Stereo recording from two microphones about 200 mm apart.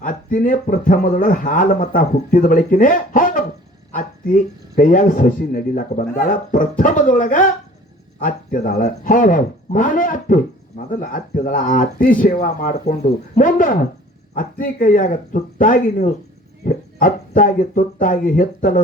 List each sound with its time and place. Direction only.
0.0 s speech: 40° left (ahead or behind)